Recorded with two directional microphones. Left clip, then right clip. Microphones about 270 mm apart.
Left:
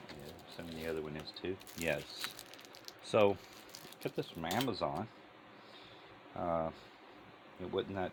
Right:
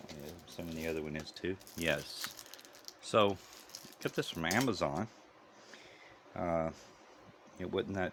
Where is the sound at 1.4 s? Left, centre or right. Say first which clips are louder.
Right 2 dB; right.